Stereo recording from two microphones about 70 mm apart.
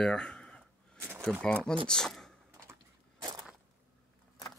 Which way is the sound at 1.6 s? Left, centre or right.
Centre.